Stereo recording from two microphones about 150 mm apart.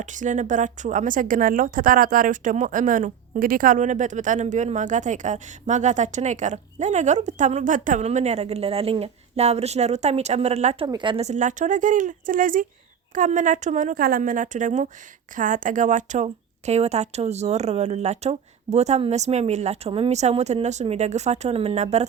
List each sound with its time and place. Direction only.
0.0 s a woman's voice: 55° right (ahead or behind)
10.8 s a woman's voice: 30° right (ahead or behind)
11.3 s a woman's voice: 55° right (ahead or behind)